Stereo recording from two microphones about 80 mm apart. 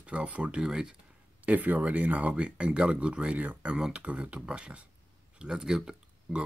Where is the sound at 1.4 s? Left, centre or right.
Right.